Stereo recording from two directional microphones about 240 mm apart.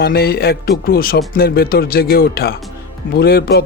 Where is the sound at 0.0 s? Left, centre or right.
Left.